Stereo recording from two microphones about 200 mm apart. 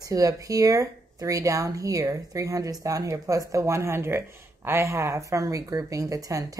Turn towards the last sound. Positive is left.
turn(degrees=-15)  # may be behind; listen again after turning